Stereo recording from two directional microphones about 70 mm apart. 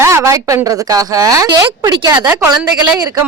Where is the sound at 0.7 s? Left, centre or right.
Right.